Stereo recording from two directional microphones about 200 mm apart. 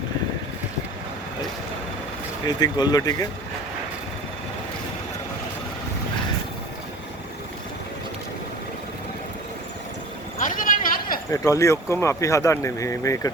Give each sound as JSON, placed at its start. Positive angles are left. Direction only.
{"t": 2.5, "sound": "speech", "side_deg": 20}
{"t": 10.4, "sound": "a sound", "side_deg": 45}
{"t": 11.3, "sound": "speech", "side_deg": 15}